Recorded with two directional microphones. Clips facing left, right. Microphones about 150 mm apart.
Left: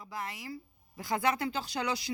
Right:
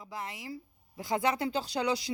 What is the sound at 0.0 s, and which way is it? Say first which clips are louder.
Speech: even; 20° right (ahead or behind).